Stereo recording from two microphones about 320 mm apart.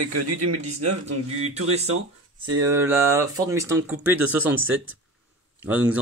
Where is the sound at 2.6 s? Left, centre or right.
Centre.